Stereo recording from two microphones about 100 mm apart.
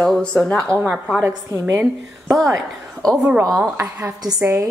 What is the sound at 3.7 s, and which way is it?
Speech, 25° right (ahead or behind).